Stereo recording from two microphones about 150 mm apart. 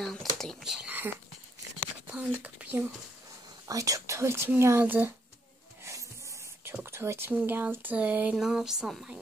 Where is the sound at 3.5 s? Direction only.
25° right (ahead or behind).